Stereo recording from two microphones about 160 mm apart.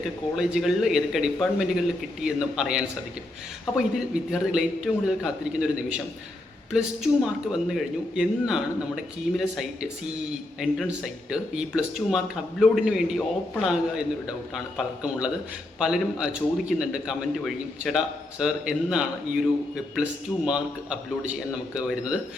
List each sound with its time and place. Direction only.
0.3 s speech: 5° right (ahead or behind)
3.9 s speech: 5° right (ahead or behind)